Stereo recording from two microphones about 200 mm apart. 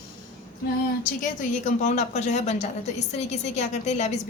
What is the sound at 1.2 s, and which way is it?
A woman's voice, 40° left (ahead or behind).